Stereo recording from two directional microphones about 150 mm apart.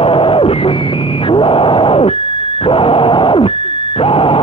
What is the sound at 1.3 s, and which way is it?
Radio, 35° left (ahead or behind).